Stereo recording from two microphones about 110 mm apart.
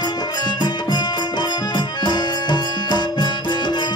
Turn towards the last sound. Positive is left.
turn(degrees=40)  # may be behind; listen again after turning